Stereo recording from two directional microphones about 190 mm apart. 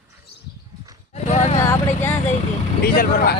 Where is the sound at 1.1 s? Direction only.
35° left (ahead or behind).